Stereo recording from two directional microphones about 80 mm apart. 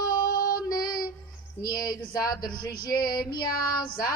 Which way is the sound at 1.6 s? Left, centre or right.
Left.